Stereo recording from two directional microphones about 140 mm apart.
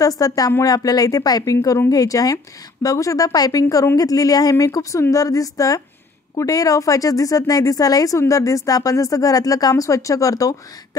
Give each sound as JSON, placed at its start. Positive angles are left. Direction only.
{"t": 0.0, "sound": "a woman's voice", "side_deg": 25}